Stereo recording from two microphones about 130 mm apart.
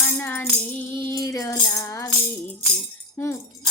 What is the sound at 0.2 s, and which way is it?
Music, 15° left (ahead or behind).